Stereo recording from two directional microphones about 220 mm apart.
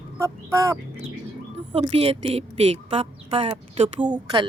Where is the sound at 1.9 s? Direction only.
25° right (ahead or behind).